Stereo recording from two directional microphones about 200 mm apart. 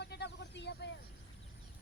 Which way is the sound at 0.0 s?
55° left (ahead or behind).